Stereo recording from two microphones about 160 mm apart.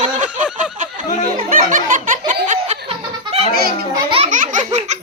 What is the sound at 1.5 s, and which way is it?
Speech, 55° right (ahead or behind).